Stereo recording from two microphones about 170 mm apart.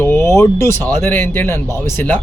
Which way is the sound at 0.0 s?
15° left (ahead or behind).